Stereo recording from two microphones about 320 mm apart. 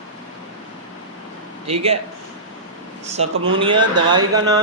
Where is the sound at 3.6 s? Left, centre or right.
Centre.